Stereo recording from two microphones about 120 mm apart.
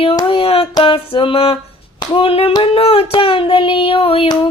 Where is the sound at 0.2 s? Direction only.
45° left (ahead or behind).